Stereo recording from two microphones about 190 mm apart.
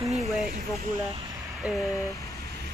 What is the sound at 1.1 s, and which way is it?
Speech, 20° right (ahead or behind).